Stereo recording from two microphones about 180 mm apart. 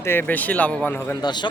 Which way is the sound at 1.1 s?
25° left (ahead or behind).